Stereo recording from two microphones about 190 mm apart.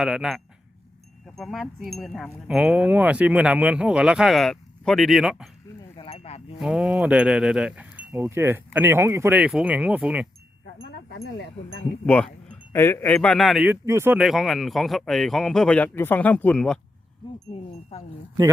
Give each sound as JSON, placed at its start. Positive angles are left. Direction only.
{"t": 0.0, "sound": "speech", "side_deg": 0}
{"t": 6.0, "sound": "a sound", "side_deg": 30}
{"t": 6.6, "sound": "speech", "side_deg": -5}
{"t": 11.1, "sound": "speech", "side_deg": 65}
{"t": 12.0, "sound": "speech", "side_deg": 5}
{"t": 13.8, "sound": "speech", "side_deg": -15}
{"t": 14.2, "sound": "speech", "side_deg": 0}
{"t": 17.2, "sound": "speech", "side_deg": 25}